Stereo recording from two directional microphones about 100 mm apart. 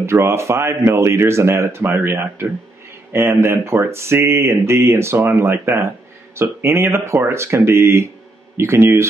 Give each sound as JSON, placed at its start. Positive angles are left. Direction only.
{"t": 0.0, "sound": "speech", "side_deg": -25}